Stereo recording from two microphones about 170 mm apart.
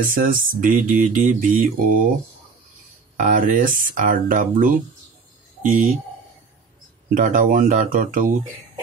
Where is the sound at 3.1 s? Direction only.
50° right (ahead or behind).